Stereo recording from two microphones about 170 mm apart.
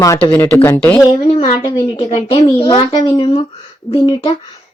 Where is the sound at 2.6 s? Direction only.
25° left (ahead or behind).